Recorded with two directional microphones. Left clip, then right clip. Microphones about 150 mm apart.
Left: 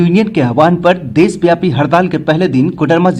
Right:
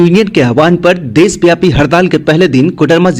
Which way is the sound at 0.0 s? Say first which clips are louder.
Right 5 dB; 35° right (ahead or behind).